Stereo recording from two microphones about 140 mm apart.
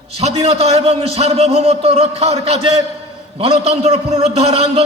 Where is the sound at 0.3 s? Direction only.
45° right (ahead or behind).